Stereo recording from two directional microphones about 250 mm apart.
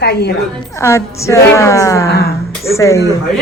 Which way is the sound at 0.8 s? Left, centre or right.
Centre.